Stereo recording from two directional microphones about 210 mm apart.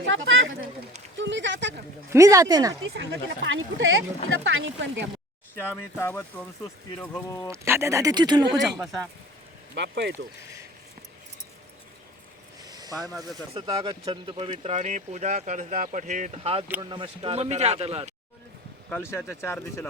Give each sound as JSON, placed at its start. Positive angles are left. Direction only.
{"t": 0.0, "sound": "speech", "side_deg": -65}
{"t": 1.2, "sound": "a sound", "side_deg": -60}
{"t": 2.0, "sound": "speech", "side_deg": -15}
{"t": 2.9, "sound": "speech", "side_deg": -60}
{"t": 5.5, "sound": "speech", "side_deg": 10}
{"t": 7.5, "sound": "speech", "side_deg": -15}
{"t": 8.8, "sound": "speech", "side_deg": 0}
{"t": 9.7, "sound": "speech", "side_deg": -55}
{"t": 12.6, "sound": "a sound", "side_deg": -20}
{"t": 13.5, "sound": "a man's voice", "side_deg": -15}
{"t": 18.9, "sound": "speech", "side_deg": 10}